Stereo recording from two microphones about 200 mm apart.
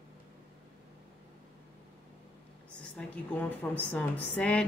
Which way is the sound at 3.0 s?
5° left (ahead or behind).